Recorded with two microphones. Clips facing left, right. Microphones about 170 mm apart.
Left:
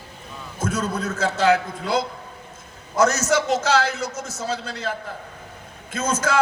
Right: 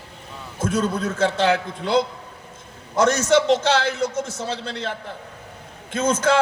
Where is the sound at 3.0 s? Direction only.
30° right (ahead or behind).